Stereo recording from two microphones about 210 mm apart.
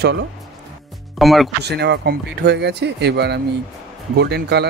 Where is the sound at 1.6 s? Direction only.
50° right (ahead or behind).